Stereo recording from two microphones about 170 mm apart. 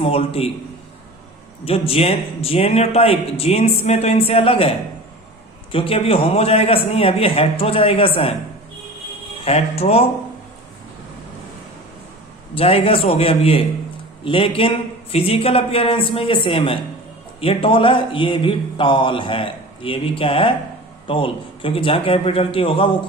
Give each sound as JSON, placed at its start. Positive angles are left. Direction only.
{"t": 0.0, "sound": "a man's voice", "side_deg": 35}
{"t": 1.6, "sound": "a man's voice", "side_deg": 35}
{"t": 5.7, "sound": "a man's voice", "side_deg": 35}
{"t": 9.4, "sound": "a man's voice", "side_deg": 35}
{"t": 12.5, "sound": "a man's voice", "side_deg": 35}